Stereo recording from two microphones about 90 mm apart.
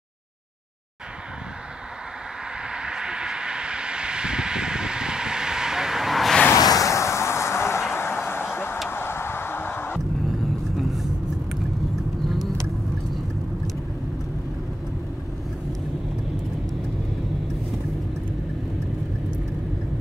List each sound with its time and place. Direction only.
2.7 s a sound: 10° right (ahead or behind)
6.5 s vehicle: 40° left (ahead or behind); by 8.7 s 25° left (ahead or behind)
8.8 s music: 25° left (ahead or behind)
10.8 s vehicle: centre (ahead or behind)